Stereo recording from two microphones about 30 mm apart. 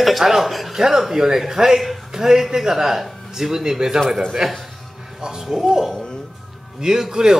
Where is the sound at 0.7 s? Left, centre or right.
Centre.